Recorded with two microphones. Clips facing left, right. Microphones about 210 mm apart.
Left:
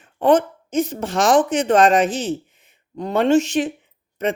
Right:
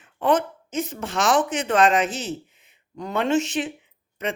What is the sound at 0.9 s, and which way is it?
A woman's voice, 35° left (ahead or behind).